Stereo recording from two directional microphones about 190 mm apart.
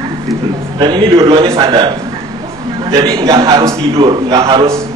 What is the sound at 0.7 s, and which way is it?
A man's voice, 25° right (ahead or behind).